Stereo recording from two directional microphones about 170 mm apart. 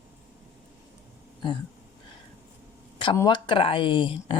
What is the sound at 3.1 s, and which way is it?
Speech, 25° left (ahead or behind).